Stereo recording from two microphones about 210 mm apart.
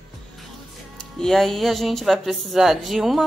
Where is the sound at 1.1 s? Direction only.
Centre (ahead or behind).